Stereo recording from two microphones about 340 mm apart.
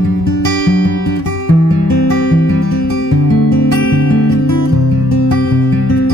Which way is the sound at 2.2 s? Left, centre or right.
Left.